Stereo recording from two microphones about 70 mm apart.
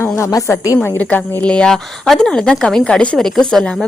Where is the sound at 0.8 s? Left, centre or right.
Left; by 3.9 s centre.